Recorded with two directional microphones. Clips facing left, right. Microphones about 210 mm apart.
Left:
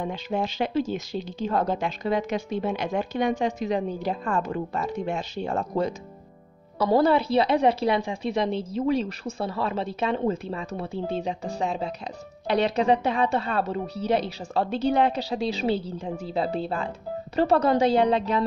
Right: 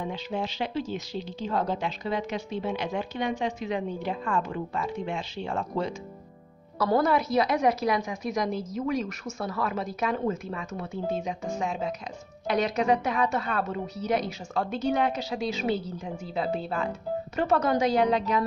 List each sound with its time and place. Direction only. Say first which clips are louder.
0.0 s speech: left 3 dB; 50° left (ahead or behind)
6.8 s a woman's voice: left 3 dB; 30° left (ahead or behind)